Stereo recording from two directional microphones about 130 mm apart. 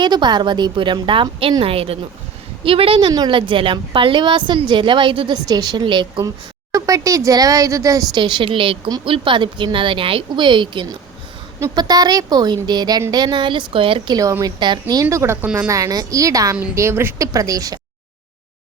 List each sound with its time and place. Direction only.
0.0 s a woman's voice: 35° right (ahead or behind)
5.5 s speech: 30° right (ahead or behind)
8.2 s a woman's voice: 40° right (ahead or behind)
14.2 s speech: 25° right (ahead or behind)
15.0 s speech: 20° right (ahead or behind)